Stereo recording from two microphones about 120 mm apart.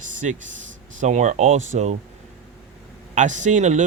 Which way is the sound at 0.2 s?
80° right.